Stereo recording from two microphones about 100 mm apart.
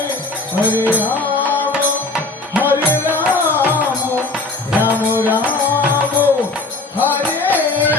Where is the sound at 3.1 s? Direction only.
15° right (ahead or behind).